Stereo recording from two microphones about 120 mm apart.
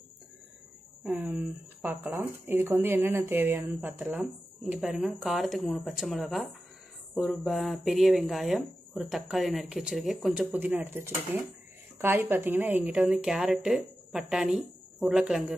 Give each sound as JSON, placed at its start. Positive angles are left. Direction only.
{"t": 1.0, "sound": "a woman's voice", "side_deg": -10}
{"t": 10.5, "sound": "a woman's voice", "side_deg": -15}